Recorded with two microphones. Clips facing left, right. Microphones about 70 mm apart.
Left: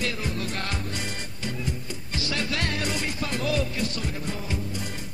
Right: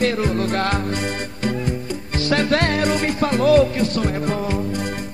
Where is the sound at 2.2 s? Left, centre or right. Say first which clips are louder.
Right 11 dB; right.